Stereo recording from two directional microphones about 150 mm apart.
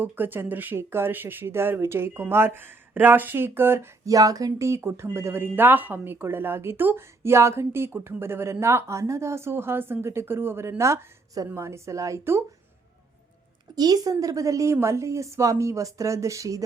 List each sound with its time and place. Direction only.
0.0 s speech: 15° right (ahead or behind)
13.7 s a woman's voice: 25° right (ahead or behind)